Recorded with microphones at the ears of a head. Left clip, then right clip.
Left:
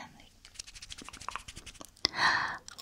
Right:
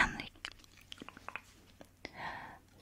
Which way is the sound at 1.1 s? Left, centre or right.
Left.